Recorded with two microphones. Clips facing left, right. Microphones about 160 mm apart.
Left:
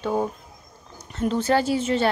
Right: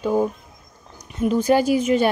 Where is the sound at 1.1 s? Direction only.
10° right (ahead or behind).